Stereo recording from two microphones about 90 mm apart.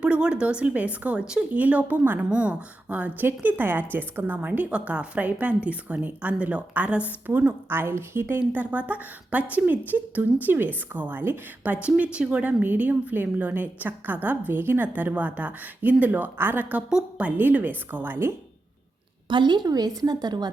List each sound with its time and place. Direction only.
0.0 s a woman's voice: 10° right (ahead or behind)
19.3 s a woman's voice: 60° right (ahead or behind)